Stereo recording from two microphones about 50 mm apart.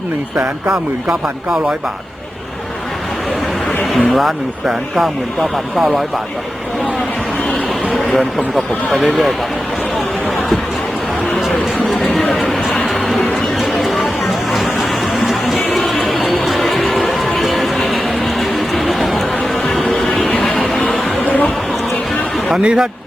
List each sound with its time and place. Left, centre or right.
0.3 s speech: centre
4.1 s speech: centre
8.1 s speech: centre
11.3 s a sound: centre
15.2 s music: centre
17.2 s a sound: centre
19.8 s music: centre
20.4 s a sound: centre
22.6 s speech: centre